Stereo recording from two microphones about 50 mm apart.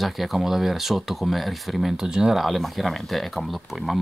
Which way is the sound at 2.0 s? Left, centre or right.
Centre.